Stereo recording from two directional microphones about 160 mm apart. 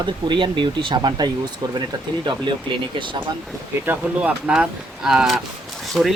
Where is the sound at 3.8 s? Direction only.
10° right (ahead or behind).